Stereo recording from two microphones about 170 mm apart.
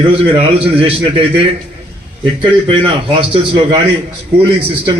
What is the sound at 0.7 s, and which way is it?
Speech, 30° right (ahead or behind).